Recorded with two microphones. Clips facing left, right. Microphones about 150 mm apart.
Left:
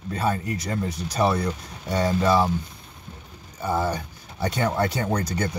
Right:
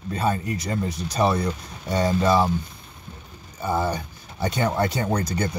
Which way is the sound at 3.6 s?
15° right (ahead or behind).